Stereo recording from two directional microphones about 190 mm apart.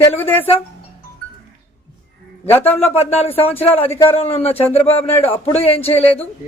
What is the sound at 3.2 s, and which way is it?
Speech, 30° left (ahead or behind).